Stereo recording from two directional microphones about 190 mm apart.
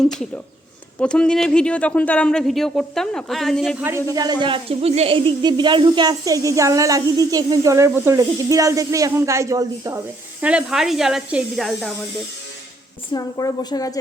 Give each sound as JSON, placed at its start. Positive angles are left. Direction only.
{"t": 0.0, "sound": "a woman's voice", "side_deg": 0}
{"t": 4.1, "sound": "speech", "side_deg": -20}
{"t": 10.4, "sound": "a woman's voice", "side_deg": -5}
{"t": 13.1, "sound": "a woman's voice", "side_deg": 20}